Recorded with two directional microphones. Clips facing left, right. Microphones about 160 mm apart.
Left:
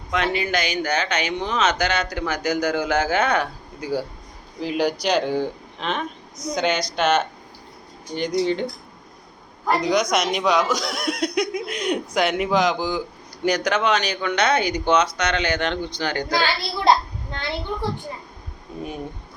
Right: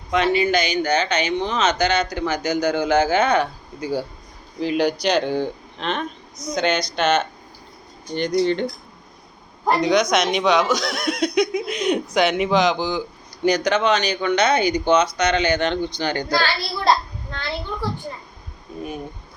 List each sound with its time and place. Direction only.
0.1 s speech: centre (ahead or behind)
9.9 s speech: 10° left (ahead or behind)
16.3 s a child's voice: 20° left (ahead or behind)